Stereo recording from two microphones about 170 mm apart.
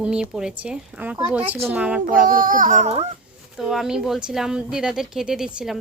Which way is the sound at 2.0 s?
55° right (ahead or behind).